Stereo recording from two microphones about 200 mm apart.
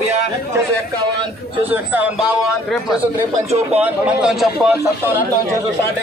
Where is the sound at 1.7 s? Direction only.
10° right (ahead or behind).